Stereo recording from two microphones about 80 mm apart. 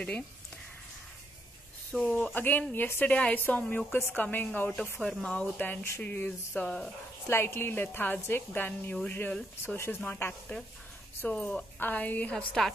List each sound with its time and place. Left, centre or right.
1.9 s a woman's voice: centre
2.3 s a woman's voice: left
4.6 s a woman's voice: centre
5.3 s a woman's voice: centre
7.2 s a woman's voice: left
11.2 s a woman's voice: centre